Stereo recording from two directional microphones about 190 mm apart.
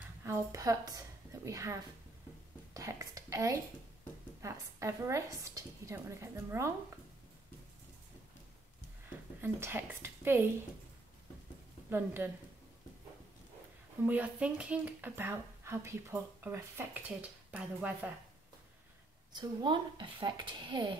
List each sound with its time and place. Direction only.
0.2 s a sound: 15° right (ahead or behind)
4.4 s a woman's voice: 15° right (ahead or behind)
9.4 s a woman's voice: 10° right (ahead or behind)
11.9 s a woman's voice: 10° right (ahead or behind)
14.0 s a woman's voice: 10° right (ahead or behind)
19.3 s speech: 25° right (ahead or behind)